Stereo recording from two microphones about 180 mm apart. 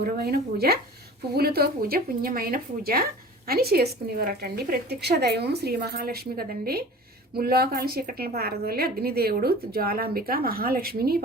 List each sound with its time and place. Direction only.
0.0 s a woman's voice: 60° right (ahead or behind)